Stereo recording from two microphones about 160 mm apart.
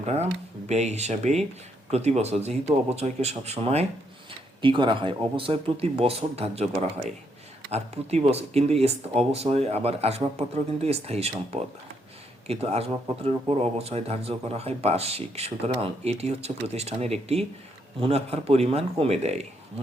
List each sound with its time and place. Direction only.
0.0 s speech: 45° right (ahead or behind)